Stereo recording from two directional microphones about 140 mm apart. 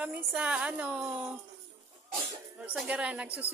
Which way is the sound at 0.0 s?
10° right (ahead or behind).